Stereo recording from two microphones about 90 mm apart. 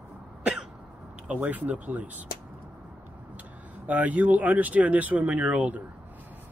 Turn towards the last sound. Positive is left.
turn(degrees=-15)  # may be behind; listen again after turning